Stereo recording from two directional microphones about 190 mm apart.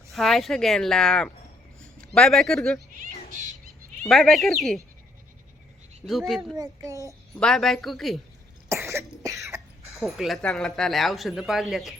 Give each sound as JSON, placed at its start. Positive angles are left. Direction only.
{"t": 0.1, "sound": "speech", "side_deg": 0}
{"t": 4.0, "sound": "speech", "side_deg": 0}
{"t": 6.1, "sound": "speech", "side_deg": 0}
{"t": 6.6, "sound": "a child's voice", "side_deg": -15}
{"t": 7.3, "sound": "speech", "side_deg": 0}
{"t": 8.7, "sound": "cough", "side_deg": -15}
{"t": 9.9, "sound": "speech", "side_deg": 0}